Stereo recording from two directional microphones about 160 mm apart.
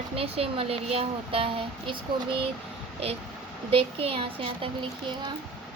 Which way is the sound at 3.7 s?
35° right (ahead or behind).